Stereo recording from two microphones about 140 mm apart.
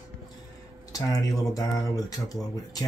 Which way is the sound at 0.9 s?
25° left (ahead or behind).